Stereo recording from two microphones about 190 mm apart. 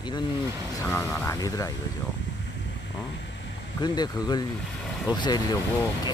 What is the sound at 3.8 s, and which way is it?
Speech, 20° left (ahead or behind).